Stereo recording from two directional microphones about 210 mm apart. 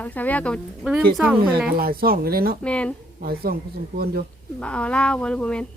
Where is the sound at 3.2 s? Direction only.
45° right (ahead or behind).